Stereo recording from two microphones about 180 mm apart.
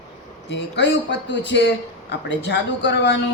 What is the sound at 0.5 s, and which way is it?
Speech, 80° left.